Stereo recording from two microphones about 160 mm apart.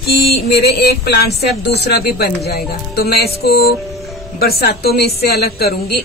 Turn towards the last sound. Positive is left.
turn(degrees=75)  # may be behind; listen again after turning